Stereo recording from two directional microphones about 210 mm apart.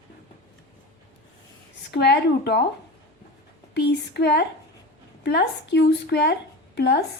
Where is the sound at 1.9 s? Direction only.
55° left (ahead or behind).